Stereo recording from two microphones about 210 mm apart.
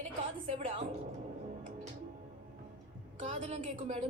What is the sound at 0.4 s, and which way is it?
Speech, 30° right (ahead or behind).